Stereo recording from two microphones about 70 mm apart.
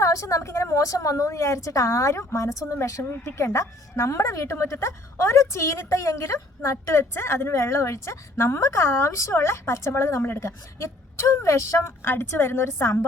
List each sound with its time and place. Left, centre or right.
0.0 s speech: left
10.8 s a woman's voice: left